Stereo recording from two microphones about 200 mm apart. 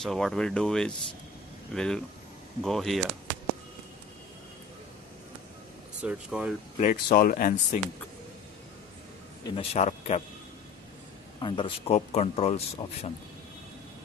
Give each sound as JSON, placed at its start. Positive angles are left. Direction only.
{"t": 0.0, "sound": "speech", "side_deg": 0}
{"t": 6.0, "sound": "speech", "side_deg": -5}
{"t": 6.8, "sound": "speech", "side_deg": 45}
{"t": 9.6, "sound": "speech", "side_deg": 30}
{"t": 11.4, "sound": "speech", "side_deg": 25}